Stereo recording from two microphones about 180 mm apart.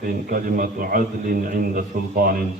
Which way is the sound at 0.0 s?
50° right (ahead or behind).